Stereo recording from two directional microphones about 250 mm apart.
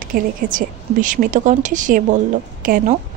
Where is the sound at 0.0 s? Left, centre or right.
Right.